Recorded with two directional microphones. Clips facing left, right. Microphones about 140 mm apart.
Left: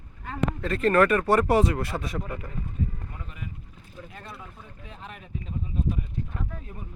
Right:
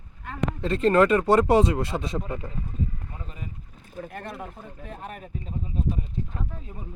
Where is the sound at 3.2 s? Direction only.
30° right (ahead or behind).